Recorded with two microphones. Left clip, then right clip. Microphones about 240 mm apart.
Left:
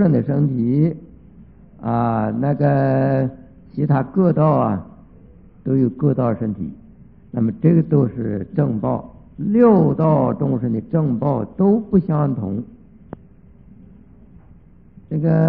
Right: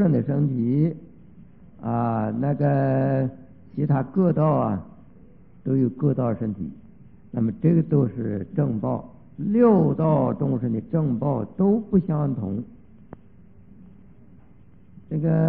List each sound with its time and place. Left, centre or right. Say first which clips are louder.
0.0 s a man's voice: left 5 dB; right
15.0 s a man's voice: left 5 dB; right